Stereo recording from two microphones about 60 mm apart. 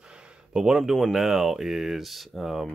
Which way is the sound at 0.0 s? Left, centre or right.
Centre.